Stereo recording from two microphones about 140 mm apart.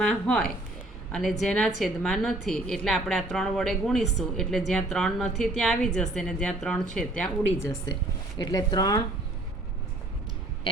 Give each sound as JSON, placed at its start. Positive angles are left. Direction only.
{"t": 0.0, "sound": "a woman's voice", "side_deg": 5}
{"t": 8.4, "sound": "speech", "side_deg": 30}